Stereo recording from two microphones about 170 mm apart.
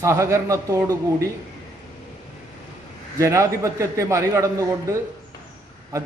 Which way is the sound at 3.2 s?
15° right (ahead or behind).